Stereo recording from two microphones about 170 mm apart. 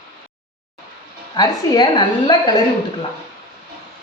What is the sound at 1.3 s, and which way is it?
A woman's voice, 25° left (ahead or behind).